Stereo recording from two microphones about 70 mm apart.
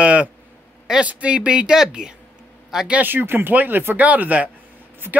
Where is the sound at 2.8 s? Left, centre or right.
Right.